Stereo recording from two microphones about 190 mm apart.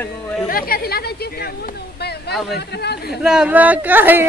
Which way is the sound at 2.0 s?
60° left (ahead or behind).